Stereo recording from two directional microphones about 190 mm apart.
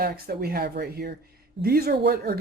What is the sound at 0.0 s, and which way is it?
Speech, 55° right (ahead or behind).